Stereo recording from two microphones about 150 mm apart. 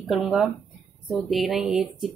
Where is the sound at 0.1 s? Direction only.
Centre (ahead or behind).